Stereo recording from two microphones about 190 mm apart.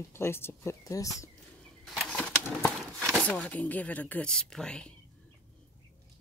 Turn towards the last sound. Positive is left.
turn(degrees=5)  # may be behind; listen again after turning